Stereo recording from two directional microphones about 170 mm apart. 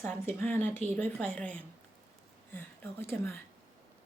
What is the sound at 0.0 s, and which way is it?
Speech, 10° left (ahead or behind).